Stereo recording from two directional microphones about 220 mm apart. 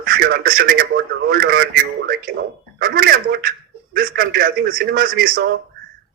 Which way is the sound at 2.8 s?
40° right (ahead or behind).